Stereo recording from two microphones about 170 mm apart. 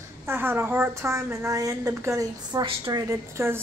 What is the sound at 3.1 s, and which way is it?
Speech, 15° right (ahead or behind).